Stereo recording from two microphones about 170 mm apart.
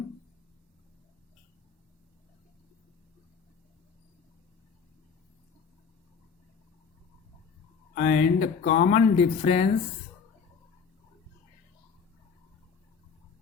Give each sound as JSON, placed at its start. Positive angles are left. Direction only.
{"t": 7.9, "sound": "speech", "side_deg": 50}